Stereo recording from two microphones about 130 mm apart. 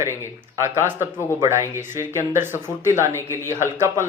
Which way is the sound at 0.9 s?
20° right (ahead or behind).